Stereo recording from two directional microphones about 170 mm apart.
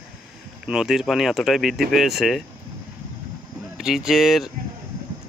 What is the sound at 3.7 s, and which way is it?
Speech, centre (ahead or behind).